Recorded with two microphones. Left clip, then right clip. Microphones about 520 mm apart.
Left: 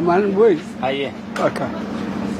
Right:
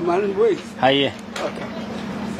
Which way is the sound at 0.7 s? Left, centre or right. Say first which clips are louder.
Right 5 dB; right.